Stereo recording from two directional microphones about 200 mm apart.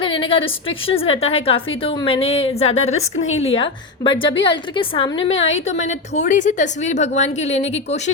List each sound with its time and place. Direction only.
0.0 s a woman's voice: 25° left (ahead or behind)
5.5 s a woman's voice: 75° left (ahead or behind)
5.9 s a woman's voice: 35° left (ahead or behind)